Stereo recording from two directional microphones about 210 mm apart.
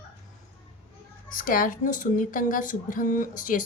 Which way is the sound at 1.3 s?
40° left (ahead or behind).